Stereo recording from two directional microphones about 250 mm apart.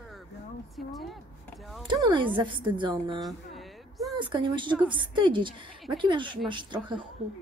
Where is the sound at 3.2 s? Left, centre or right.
Centre.